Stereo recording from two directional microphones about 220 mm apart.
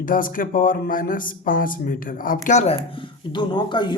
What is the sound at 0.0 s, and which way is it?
Speech, 40° left (ahead or behind).